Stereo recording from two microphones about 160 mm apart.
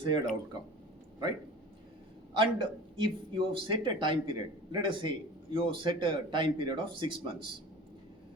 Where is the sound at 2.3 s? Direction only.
30° right (ahead or behind).